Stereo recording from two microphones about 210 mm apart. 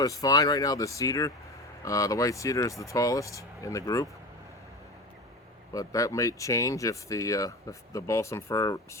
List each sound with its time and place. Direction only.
0.0 s speech: 15° left (ahead or behind)
5.7 s speech: 15° left (ahead or behind)